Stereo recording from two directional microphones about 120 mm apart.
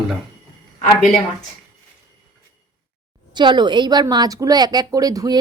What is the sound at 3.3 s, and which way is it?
Speech, 40° right (ahead or behind).